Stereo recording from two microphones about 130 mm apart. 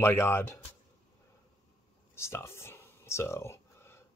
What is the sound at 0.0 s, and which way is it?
Speech, 20° left (ahead or behind).